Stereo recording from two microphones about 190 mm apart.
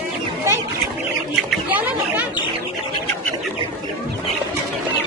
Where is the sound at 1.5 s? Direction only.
10° right (ahead or behind).